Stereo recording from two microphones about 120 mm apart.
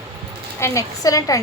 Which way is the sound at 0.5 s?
25° left (ahead or behind).